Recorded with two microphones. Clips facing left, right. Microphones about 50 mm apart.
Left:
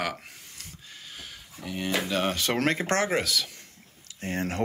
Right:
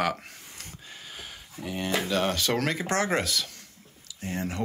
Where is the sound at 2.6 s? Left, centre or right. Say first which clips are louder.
Left 2 dB; left.